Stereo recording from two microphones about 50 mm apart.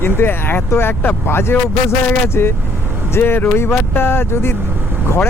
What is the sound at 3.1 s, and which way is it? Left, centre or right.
Speech, left.